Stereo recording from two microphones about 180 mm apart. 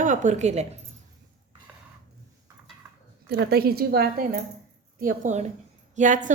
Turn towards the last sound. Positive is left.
turn(degrees=-45)  # may be behind; listen again after turning